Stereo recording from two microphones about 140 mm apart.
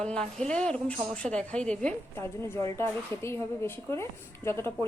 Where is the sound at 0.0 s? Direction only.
5° left (ahead or behind).